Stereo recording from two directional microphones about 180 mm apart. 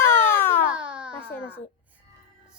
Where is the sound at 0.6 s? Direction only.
5° right (ahead or behind).